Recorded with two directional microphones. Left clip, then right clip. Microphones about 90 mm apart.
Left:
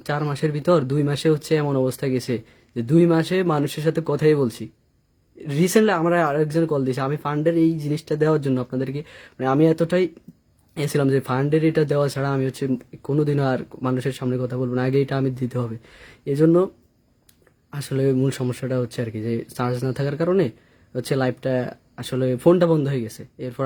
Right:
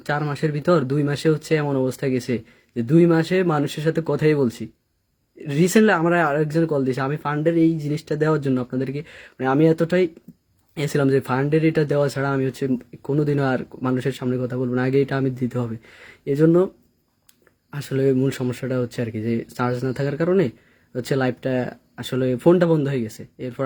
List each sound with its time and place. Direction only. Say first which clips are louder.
0.0 s speech: right 1 dB; 35° left (ahead or behind)
17.7 s speech: right 2 dB; 30° left (ahead or behind)